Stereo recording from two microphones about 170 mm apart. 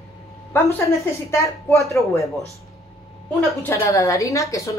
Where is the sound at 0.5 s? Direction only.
10° left (ahead or behind).